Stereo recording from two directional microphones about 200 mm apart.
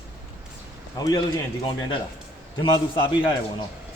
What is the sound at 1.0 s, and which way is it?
Speech, 20° left (ahead or behind).